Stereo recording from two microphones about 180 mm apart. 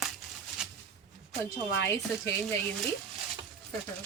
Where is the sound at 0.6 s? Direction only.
5° right (ahead or behind).